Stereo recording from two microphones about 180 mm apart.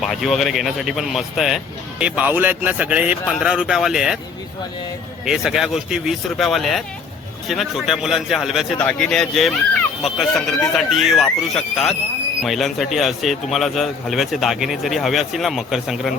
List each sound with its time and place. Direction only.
0.0 s speech: centre (ahead or behind)
5.2 s speech: 5° right (ahead or behind)